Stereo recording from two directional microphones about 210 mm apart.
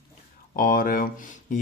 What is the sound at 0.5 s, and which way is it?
Speech, 40° left (ahead or behind).